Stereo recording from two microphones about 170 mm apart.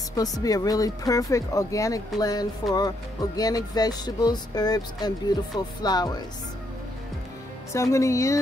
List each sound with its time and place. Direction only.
0.1 s speech: 20° left (ahead or behind)
7.7 s speech: 15° left (ahead or behind)